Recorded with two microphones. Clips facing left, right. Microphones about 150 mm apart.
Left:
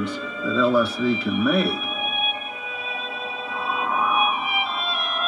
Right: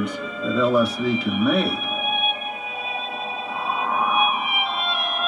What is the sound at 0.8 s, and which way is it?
Speech, 30° left (ahead or behind).